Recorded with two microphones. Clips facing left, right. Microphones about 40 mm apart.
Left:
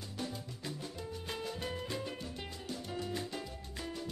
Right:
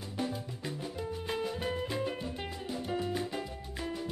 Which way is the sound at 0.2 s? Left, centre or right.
Centre.